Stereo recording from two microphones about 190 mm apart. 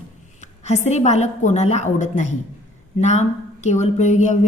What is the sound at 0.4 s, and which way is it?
Speech, 35° left (ahead or behind).